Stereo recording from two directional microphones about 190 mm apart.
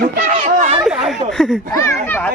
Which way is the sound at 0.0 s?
50° right (ahead or behind).